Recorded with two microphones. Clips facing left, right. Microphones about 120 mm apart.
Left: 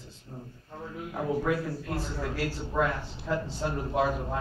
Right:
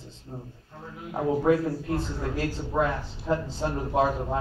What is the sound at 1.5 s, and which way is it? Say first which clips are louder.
A man's voice: right 6 dB; 25° right (ahead or behind).